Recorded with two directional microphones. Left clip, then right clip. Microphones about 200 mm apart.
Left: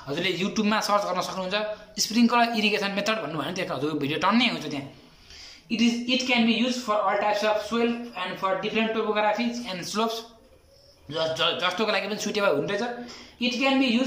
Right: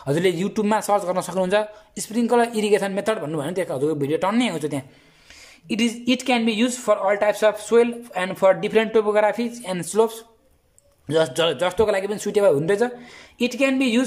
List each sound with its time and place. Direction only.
0.0 s a man's voice: 40° right (ahead or behind)